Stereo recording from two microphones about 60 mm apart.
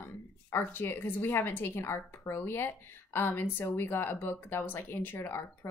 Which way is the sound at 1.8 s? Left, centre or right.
Left.